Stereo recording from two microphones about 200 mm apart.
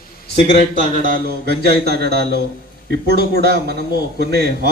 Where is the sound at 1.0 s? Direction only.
50° right (ahead or behind).